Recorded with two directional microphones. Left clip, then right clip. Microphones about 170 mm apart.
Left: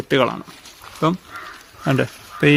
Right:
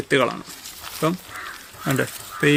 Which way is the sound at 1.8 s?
70° left (ahead or behind).